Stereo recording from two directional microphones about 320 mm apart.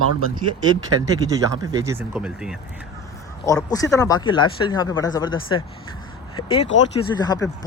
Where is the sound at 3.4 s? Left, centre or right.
Centre.